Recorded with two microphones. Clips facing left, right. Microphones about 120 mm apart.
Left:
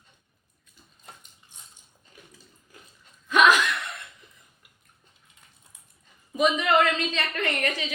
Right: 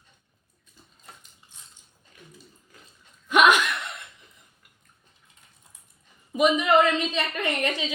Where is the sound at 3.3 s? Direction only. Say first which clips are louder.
Right 1 dB; 25° right (ahead or behind).